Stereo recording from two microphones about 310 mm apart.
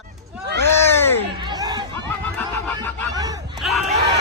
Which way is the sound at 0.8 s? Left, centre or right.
Centre.